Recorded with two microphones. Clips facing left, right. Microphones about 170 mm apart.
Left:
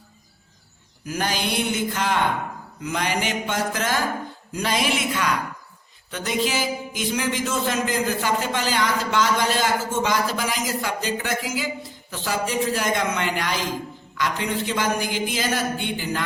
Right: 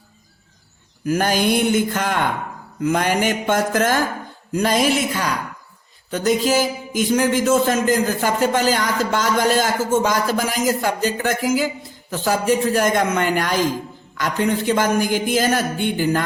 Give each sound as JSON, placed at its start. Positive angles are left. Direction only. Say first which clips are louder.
{"t": 1.0, "sound": "speech", "louder": "right 8 dB", "side_deg": -50}